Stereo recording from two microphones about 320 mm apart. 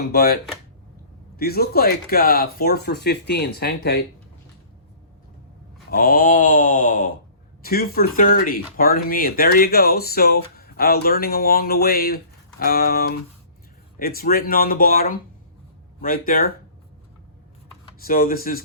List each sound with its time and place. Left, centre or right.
0.1 s speech: left
1.4 s speech: left
5.9 s speech: left
18.0 s speech: left